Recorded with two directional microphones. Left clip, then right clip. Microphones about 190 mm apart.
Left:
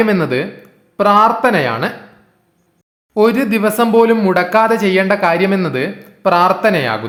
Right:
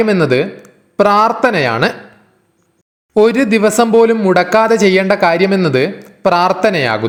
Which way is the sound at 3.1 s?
25° right (ahead or behind).